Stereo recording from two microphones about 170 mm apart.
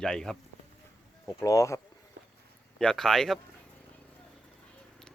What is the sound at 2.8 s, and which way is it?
Speech, 5° left (ahead or behind).